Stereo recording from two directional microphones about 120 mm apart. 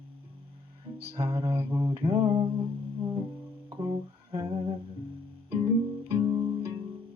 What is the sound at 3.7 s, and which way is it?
Guitar, 35° right (ahead or behind).